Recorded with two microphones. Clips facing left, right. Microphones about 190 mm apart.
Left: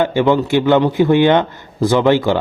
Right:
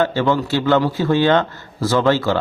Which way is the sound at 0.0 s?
15° left (ahead or behind).